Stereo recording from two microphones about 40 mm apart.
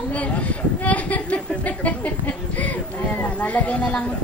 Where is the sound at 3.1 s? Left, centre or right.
Left.